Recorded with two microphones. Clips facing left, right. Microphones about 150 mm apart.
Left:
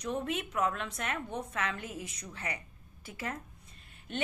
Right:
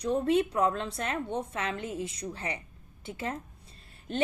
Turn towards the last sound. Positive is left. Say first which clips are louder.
# right 7 dB
turn(degrees=-35)  # may be behind; listen again after turning